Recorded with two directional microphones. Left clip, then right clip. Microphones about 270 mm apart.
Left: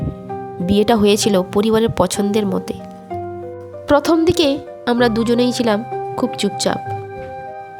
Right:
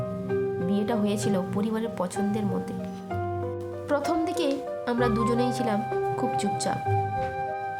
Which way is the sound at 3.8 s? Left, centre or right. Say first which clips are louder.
Left 13 dB; left.